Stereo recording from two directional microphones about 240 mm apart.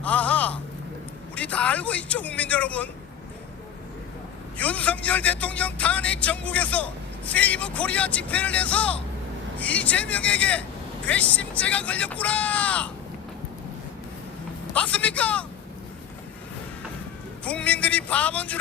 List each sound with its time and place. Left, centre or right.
0.0 s a sound: centre
1.4 s speech: centre
4.5 s speech: centre
14.7 s speech: centre
17.4 s speech: centre